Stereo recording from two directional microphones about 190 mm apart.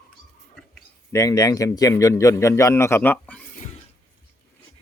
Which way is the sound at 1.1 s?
15° left (ahead or behind).